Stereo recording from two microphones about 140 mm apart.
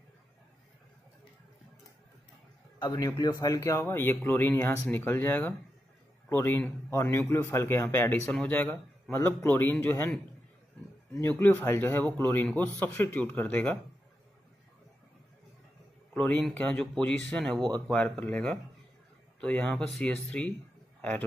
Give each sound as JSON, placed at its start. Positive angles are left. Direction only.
{"t": 2.8, "sound": "a man's voice", "side_deg": 30}
{"t": 16.1, "sound": "speech", "side_deg": 5}